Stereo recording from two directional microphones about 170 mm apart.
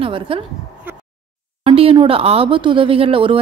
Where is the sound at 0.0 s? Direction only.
30° right (ahead or behind).